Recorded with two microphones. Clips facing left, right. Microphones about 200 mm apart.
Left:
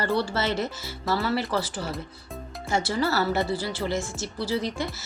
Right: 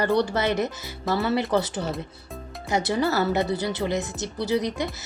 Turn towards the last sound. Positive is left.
turn(degrees=-15)  # may be behind; listen again after turning